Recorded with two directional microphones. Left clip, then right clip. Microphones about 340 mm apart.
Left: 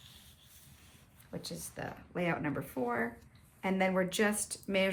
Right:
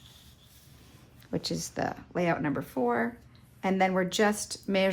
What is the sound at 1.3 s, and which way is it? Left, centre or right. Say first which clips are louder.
Speech: right 10 dB; right.